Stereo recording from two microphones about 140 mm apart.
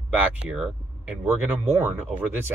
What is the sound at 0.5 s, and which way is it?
Speech, centre (ahead or behind).